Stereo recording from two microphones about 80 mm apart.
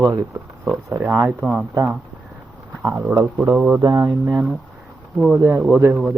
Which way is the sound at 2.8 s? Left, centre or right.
Right.